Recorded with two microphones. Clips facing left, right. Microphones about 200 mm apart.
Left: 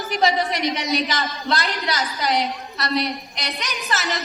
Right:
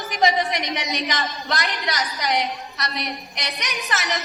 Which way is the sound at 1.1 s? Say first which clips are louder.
Left 2 dB; 20° right (ahead or behind).